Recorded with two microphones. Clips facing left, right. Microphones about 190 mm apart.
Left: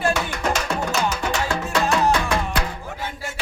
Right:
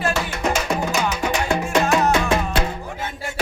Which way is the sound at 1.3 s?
20° right (ahead or behind).